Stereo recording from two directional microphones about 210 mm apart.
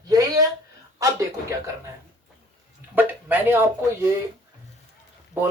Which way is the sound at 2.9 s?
10° right (ahead or behind).